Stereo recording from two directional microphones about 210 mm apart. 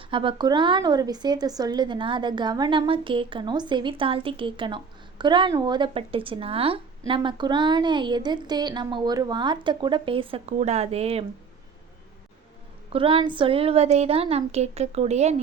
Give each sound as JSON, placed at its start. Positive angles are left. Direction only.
{"t": 0.1, "sound": "speech", "side_deg": -25}
{"t": 12.9, "sound": "speech", "side_deg": -25}